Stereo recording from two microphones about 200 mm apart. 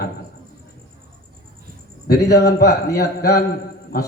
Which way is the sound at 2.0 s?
50° left (ahead or behind).